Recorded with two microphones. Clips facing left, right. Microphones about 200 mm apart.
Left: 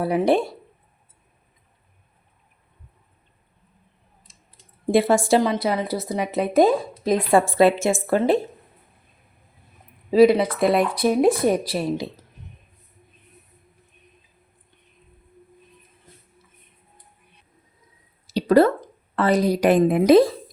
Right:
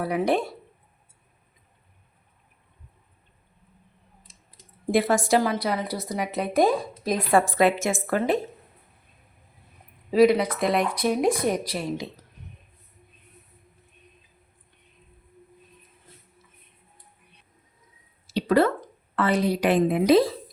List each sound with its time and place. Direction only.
0.0 s a woman's voice: 30° left (ahead or behind)
4.9 s a woman's voice: 30° left (ahead or behind)
10.1 s a woman's voice: 30° left (ahead or behind)
18.3 s a sound: 40° left (ahead or behind)
19.1 s a woman's voice: 40° left (ahead or behind)